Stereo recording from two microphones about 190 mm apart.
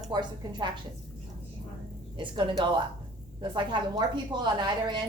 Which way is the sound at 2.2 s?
25° right (ahead or behind).